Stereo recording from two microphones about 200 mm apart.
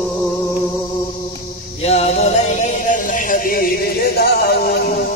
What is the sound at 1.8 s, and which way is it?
Music, 30° left (ahead or behind).